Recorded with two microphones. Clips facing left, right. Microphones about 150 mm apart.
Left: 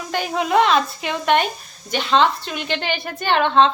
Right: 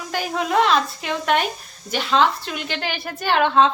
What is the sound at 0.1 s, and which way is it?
A woman's voice, centre (ahead or behind).